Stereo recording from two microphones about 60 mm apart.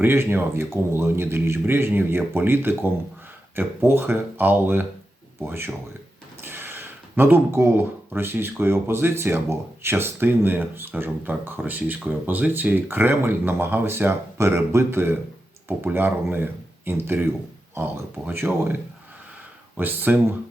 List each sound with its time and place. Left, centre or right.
0.0 s a man's voice: right